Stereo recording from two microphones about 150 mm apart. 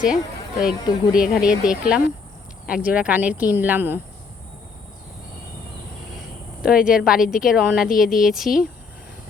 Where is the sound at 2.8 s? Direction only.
10° right (ahead or behind).